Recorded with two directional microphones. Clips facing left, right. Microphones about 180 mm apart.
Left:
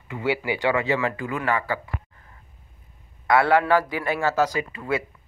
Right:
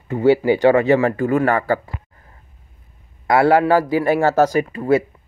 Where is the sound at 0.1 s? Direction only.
40° right (ahead or behind).